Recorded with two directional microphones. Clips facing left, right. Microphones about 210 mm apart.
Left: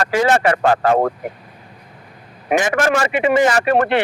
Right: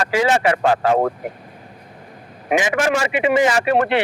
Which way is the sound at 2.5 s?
50° left (ahead or behind).